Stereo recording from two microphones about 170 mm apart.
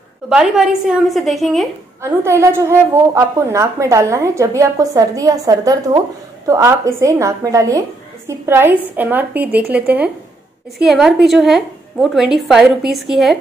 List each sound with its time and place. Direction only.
0.3 s a woman's voice: 5° right (ahead or behind)
2.0 s a woman's voice: 15° right (ahead or behind)